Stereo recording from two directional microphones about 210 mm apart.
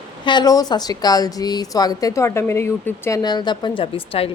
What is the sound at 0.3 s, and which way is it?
Speech, 20° left (ahead or behind).